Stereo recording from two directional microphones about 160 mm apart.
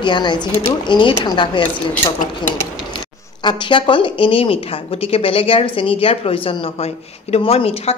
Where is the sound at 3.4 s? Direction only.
30° left (ahead or behind).